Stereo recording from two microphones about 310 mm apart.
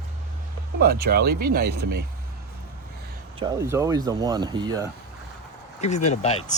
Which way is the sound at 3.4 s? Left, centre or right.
Centre.